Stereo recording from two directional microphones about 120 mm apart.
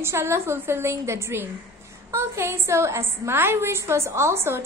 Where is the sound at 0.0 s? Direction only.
20° right (ahead or behind).